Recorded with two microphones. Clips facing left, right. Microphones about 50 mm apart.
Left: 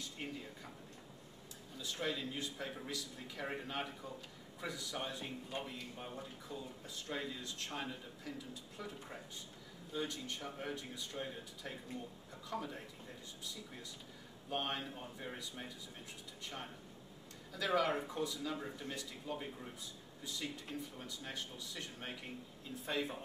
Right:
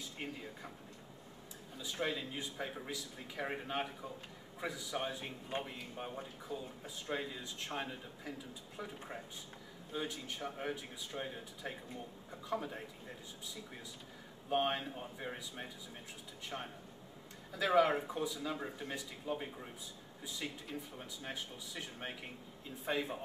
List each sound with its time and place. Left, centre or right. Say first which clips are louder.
0.2 s a man's voice: right 1 dB; centre
1.8 s a man's voice: right 2 dB; centre
9.9 s a man's voice: even; centre
14.5 s a man's voice: right 5 dB; centre
17.5 s a man's voice: right 4 dB; centre